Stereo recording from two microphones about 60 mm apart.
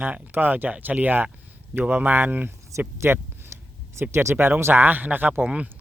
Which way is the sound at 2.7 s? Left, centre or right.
Right.